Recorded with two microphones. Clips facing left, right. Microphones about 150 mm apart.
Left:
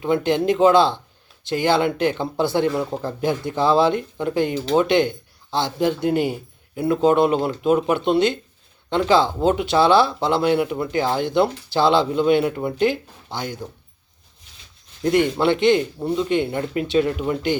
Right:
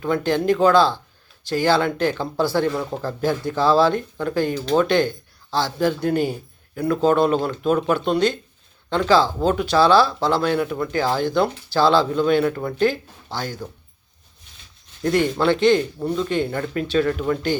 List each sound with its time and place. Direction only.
0.0 s speech: 20° left (ahead or behind)
15.0 s speech: 20° left (ahead or behind)